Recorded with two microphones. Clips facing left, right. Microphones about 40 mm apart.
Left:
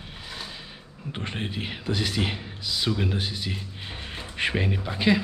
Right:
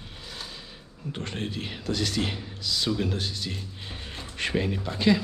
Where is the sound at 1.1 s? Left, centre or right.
Left.